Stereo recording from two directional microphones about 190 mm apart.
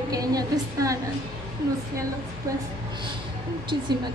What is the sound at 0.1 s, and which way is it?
Speech, 20° right (ahead or behind).